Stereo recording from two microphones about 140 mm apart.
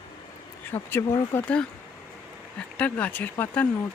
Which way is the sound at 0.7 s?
15° left (ahead or behind).